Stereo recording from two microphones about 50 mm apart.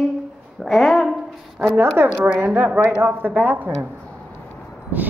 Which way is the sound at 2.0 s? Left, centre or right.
Right.